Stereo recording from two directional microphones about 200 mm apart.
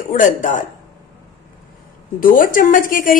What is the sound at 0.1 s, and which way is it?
Speech, 40° left (ahead or behind).